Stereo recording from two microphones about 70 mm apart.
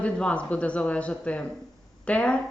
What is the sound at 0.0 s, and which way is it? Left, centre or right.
A woman's voice, centre.